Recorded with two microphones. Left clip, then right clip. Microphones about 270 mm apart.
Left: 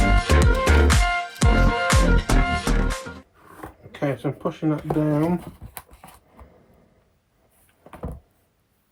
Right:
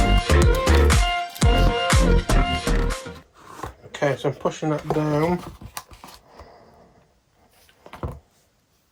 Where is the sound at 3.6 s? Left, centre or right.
Right.